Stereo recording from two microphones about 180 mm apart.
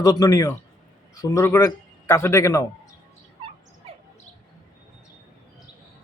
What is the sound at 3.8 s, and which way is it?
Bird, 30° right (ahead or behind).